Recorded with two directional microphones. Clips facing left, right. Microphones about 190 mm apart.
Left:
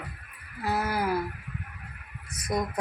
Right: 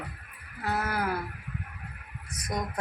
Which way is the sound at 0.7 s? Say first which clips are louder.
Left 2 dB; 10° left (ahead or behind).